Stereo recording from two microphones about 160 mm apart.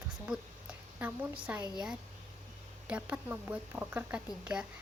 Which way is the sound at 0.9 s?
10° right (ahead or behind).